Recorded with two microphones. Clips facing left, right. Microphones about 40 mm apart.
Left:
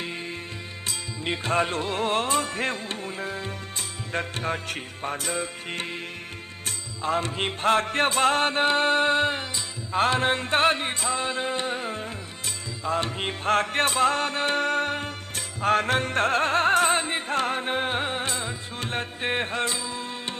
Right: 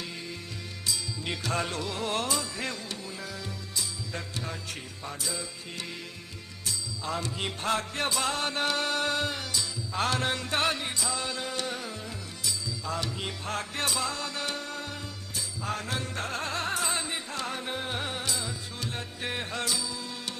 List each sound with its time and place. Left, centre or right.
0.9 s music: left